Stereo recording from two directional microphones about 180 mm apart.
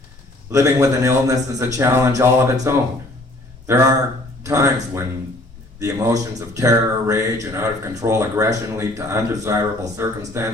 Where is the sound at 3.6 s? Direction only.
15° right (ahead or behind).